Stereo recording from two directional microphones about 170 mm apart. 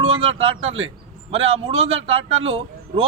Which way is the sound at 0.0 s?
35° right (ahead or behind).